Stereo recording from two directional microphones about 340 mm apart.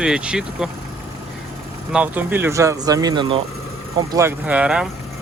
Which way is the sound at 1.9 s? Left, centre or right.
Centre.